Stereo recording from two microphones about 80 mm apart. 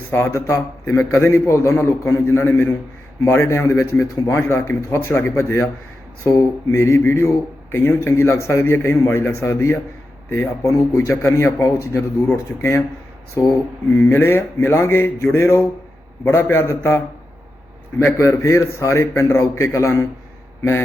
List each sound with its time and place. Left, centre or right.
0.1 s a man's voice: left
13.9 s a man's voice: left
18.0 s a man's voice: left